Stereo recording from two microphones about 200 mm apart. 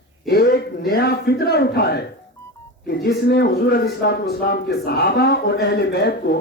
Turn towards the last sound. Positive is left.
turn(degrees=55)  # may be behind; listen again after turning